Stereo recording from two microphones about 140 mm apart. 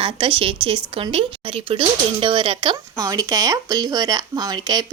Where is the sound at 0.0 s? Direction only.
40° right (ahead or behind).